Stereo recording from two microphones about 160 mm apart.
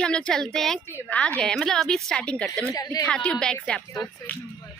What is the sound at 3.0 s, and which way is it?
Speech, 5° left (ahead or behind).